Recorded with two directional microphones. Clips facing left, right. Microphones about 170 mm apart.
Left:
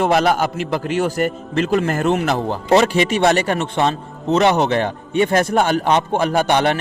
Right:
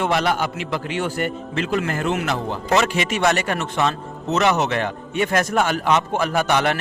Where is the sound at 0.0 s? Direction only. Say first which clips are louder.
Left 5 dB; 40° left (ahead or behind).